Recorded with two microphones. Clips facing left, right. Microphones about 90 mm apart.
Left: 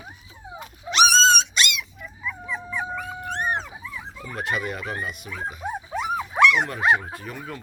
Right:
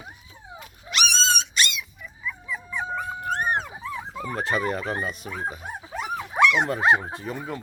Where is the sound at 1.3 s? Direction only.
70° left (ahead or behind).